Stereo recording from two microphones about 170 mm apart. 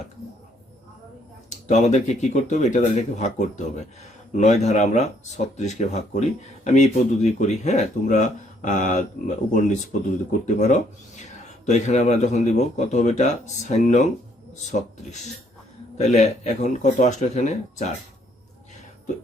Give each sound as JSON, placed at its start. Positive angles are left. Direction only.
{"t": 1.6, "sound": "a man's voice", "side_deg": 45}